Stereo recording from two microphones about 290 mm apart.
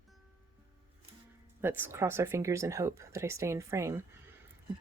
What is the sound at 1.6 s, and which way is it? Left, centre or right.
Speech, centre.